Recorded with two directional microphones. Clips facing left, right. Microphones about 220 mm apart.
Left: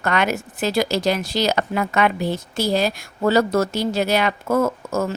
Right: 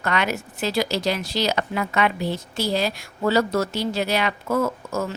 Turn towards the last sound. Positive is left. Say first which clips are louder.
# left 4 dB
turn(degrees=45)  # may be behind; listen again after turning